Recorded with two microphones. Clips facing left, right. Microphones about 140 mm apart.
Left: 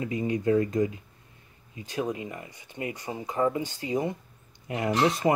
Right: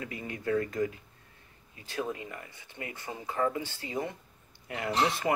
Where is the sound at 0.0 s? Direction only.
25° left (ahead or behind).